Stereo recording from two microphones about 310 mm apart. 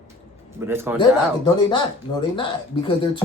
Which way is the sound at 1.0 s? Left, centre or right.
Centre.